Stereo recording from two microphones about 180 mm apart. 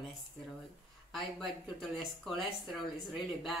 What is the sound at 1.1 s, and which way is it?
Speech, centre (ahead or behind).